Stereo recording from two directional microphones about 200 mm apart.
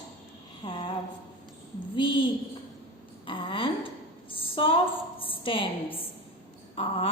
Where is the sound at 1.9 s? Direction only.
25° left (ahead or behind).